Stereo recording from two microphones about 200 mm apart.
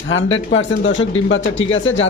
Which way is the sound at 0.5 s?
70° left (ahead or behind).